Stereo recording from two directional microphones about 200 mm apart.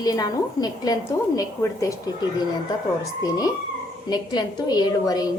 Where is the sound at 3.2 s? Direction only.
20° left (ahead or behind).